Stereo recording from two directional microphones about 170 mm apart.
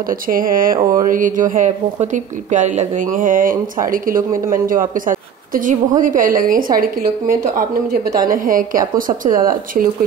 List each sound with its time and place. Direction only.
0.3 s speech: 55° right (ahead or behind)
0.7 s a sound: 20° right (ahead or behind)
1.1 s speech: 50° right (ahead or behind)